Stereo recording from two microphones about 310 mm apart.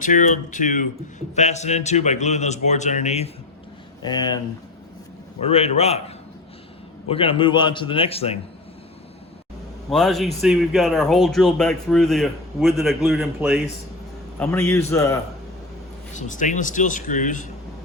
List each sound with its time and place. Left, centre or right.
0.0 s a man's voice: left
5.4 s a man's voice: centre
7.1 s a man's voice: centre
9.9 s a man's voice: centre
16.1 s a man's voice: left